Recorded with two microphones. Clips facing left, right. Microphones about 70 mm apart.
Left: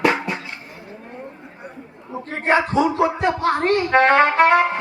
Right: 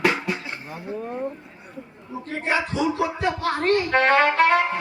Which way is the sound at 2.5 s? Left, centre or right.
Left.